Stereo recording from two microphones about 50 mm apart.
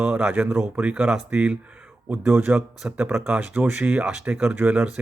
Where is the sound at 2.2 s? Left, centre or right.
Right.